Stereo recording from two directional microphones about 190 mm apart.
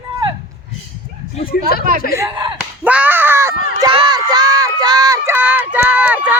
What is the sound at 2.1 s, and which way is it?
Speech, 15° right (ahead or behind).